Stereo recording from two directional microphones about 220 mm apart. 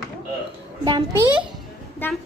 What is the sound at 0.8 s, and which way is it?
Speech, 20° right (ahead or behind).